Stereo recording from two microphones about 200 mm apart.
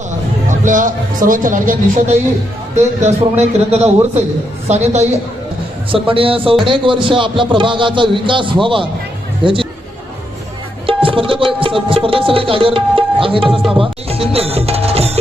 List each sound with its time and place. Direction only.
0.4 s a man's voice: 40° right (ahead or behind)
10.8 s music: 25° right (ahead or behind)
13.5 s music: centre (ahead or behind)
13.7 s music: 30° right (ahead or behind)